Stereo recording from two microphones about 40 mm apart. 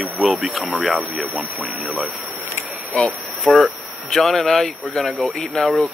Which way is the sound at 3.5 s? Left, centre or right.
Centre.